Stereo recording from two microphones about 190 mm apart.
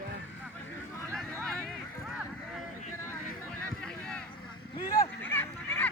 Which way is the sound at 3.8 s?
5° left (ahead or behind).